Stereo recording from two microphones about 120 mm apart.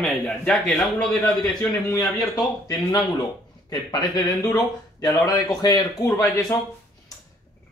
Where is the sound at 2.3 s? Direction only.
30° left (ahead or behind).